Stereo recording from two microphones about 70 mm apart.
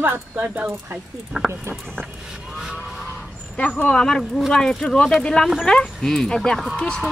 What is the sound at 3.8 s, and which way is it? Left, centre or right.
Speech, centre.